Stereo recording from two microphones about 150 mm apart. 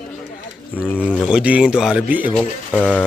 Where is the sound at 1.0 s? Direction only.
5° right (ahead or behind).